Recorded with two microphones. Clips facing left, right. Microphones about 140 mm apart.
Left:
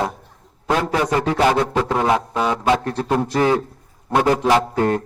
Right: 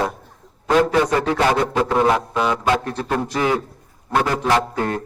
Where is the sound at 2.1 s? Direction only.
30° left (ahead or behind).